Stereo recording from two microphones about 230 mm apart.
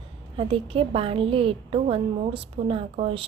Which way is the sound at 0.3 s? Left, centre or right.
Right.